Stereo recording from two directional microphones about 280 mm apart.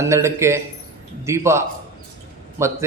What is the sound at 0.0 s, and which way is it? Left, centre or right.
A man's voice, centre.